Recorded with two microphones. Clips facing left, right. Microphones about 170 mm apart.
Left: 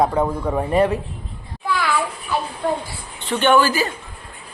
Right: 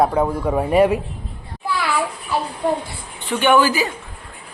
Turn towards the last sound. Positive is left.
turn(degrees=-15)  # may be behind; listen again after turning